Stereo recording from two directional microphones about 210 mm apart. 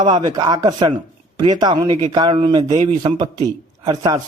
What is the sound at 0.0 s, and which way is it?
A man's voice, 20° right (ahead or behind).